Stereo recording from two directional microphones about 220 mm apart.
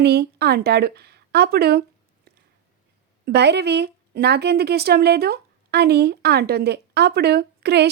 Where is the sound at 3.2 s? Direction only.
50° right (ahead or behind).